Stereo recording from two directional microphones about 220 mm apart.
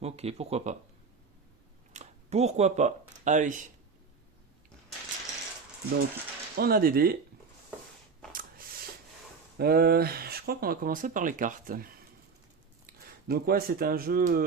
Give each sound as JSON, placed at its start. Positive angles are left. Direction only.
{"t": 0.0, "sound": "speech", "side_deg": -30}
{"t": 1.9, "sound": "speech", "side_deg": -30}
{"t": 6.6, "sound": "speech", "side_deg": -40}
{"t": 8.3, "sound": "a sound", "side_deg": -40}
{"t": 9.6, "sound": "speech", "side_deg": -45}